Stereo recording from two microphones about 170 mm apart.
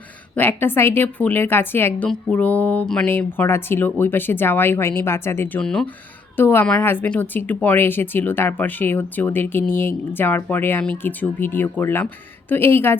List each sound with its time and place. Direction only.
0.3 s speech: 10° left (ahead or behind)